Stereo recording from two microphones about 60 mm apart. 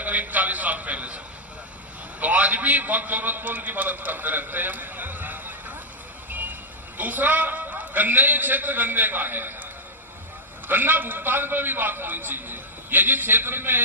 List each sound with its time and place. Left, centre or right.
0.0 s a sound: right
2.2 s a man's voice: right
10.7 s a man's voice: right